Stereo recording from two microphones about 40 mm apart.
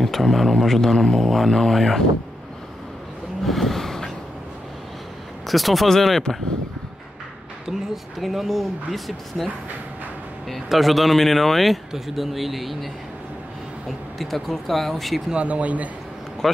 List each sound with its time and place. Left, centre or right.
0.0 s speech: centre
3.4 s a sound: centre
5.5 s speech: centre
7.6 s speech: centre
10.7 s speech: centre
15.3 s speech: right